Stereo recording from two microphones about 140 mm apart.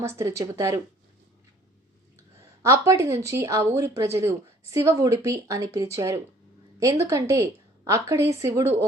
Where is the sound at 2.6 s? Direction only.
20° right (ahead or behind).